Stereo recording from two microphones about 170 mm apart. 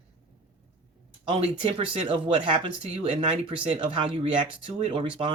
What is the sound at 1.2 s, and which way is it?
Speech, 35° right (ahead or behind).